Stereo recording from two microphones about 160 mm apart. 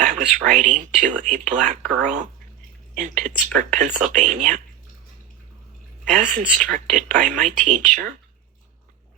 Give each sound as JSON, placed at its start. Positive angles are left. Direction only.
{"t": 0.0, "sound": "speech", "side_deg": -50}
{"t": 6.1, "sound": "speech", "side_deg": -50}